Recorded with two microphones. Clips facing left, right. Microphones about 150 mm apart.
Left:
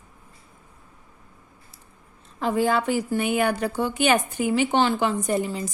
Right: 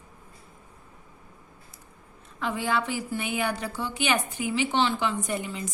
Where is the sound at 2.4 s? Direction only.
45° left (ahead or behind).